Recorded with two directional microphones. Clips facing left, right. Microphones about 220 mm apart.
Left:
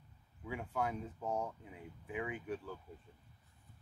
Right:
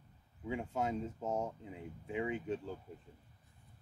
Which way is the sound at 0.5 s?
25° right (ahead or behind).